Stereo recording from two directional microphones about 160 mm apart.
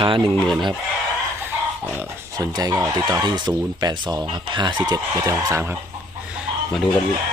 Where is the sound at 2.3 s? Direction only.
25° right (ahead or behind).